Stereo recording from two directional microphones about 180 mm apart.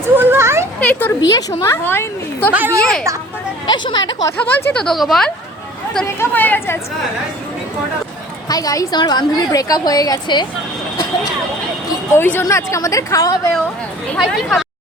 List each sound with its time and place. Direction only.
0.2 s a sound: 15° right (ahead or behind)
0.8 s speech: 10° left (ahead or behind)
1.3 s a woman's voice: 20° left (ahead or behind)
2.5 s a woman's voice: 10° right (ahead or behind)
2.8 s speech: 5° left (ahead or behind)
3.7 s a woman's voice: 25° left (ahead or behind)
4.4 s speech: 5° left (ahead or behind)
6.1 s a woman's voice: 10° left (ahead or behind)
8.4 s a woman's voice: 20° left (ahead or behind)
12.1 s a woman's voice: 10° left (ahead or behind)